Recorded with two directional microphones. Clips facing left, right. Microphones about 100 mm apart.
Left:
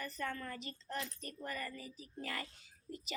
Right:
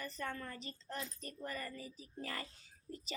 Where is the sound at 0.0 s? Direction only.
30° right (ahead or behind).